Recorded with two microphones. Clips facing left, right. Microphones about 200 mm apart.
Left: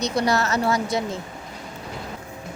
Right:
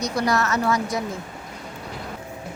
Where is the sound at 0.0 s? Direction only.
25° left (ahead or behind).